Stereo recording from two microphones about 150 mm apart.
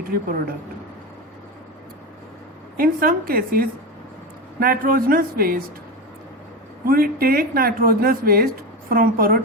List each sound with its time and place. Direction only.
0.1 s a woman's voice: 90° right
2.7 s speech: 75° right (ahead or behind)
6.8 s a woman's voice: 80° right